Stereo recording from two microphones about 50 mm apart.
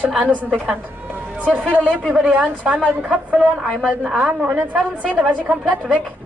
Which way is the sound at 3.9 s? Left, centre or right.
Centre.